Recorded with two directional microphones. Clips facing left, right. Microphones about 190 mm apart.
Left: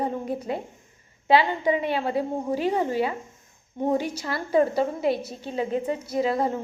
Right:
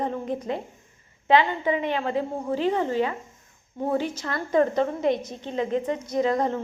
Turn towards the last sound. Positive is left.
turn(degrees=5)  # may be behind; listen again after turning